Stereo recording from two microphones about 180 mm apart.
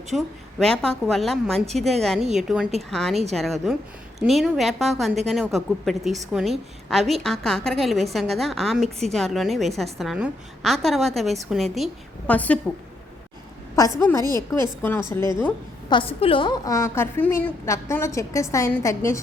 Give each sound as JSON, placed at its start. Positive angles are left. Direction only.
{"t": 0.1, "sound": "a woman's voice", "side_deg": 0}
{"t": 13.7, "sound": "a woman's voice", "side_deg": 15}
{"t": 15.9, "sound": "a woman's voice", "side_deg": 30}